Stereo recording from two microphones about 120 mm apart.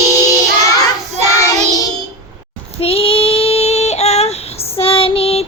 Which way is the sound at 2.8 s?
50° left (ahead or behind).